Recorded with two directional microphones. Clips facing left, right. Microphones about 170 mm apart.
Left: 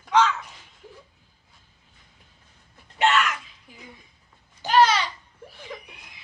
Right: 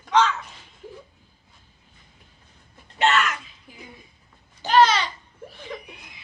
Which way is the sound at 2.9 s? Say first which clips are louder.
Even; 10° left (ahead or behind).